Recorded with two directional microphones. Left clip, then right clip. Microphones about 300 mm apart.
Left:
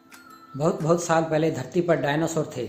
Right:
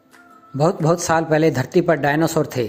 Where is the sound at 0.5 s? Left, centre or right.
Right.